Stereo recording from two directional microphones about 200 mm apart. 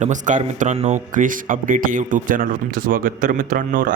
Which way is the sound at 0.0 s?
40° right (ahead or behind).